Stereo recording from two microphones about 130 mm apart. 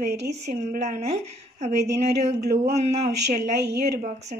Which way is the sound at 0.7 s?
65° right (ahead or behind).